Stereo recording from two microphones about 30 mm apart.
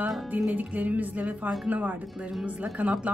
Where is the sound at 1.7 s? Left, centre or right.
Right.